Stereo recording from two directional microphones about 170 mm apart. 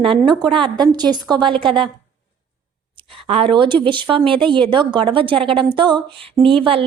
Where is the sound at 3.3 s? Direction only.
35° right (ahead or behind).